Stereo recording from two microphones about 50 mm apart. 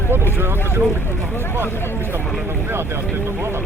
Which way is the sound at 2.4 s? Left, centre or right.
Right.